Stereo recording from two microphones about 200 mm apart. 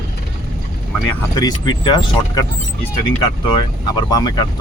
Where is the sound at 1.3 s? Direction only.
20° left (ahead or behind).